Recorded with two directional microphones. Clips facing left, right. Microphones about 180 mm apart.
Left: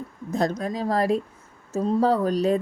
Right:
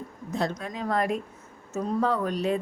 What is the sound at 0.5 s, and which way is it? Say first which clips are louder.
A woman's voice: left 4 dB; 35° left (ahead or behind).